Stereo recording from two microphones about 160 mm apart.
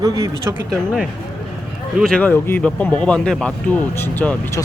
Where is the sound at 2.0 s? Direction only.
5° left (ahead or behind).